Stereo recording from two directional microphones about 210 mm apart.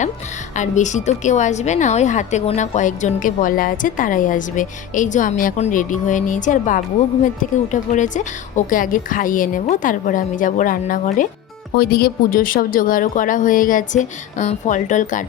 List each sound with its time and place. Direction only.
0.5 s a woman's voice: 35° left (ahead or behind)